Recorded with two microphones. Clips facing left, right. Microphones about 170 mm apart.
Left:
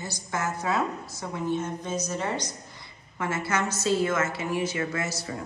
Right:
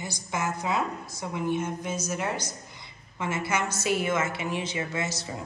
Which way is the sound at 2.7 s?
15° right (ahead or behind).